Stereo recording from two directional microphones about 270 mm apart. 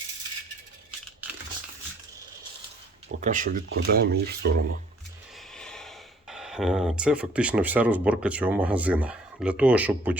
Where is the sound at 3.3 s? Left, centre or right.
Right.